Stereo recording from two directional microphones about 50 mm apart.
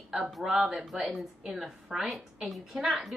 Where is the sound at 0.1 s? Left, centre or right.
Centre.